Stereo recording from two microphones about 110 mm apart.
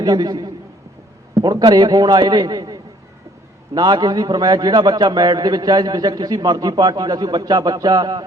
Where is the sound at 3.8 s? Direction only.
40° right (ahead or behind).